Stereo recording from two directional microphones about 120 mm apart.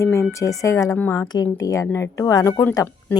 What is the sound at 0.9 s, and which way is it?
Speech, 15° left (ahead or behind).